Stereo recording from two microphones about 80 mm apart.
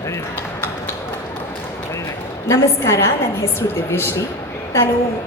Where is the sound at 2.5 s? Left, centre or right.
Left.